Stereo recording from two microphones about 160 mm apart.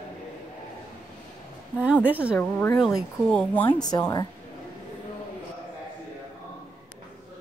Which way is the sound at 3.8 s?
25° left (ahead or behind).